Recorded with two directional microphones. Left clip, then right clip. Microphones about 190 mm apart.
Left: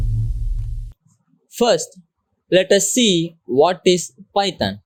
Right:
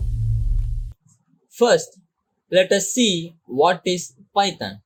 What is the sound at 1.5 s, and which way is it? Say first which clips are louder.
Speech: even; 45° left (ahead or behind).